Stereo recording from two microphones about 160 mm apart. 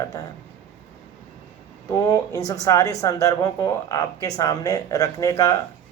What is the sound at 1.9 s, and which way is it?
Speech, 20° left (ahead or behind).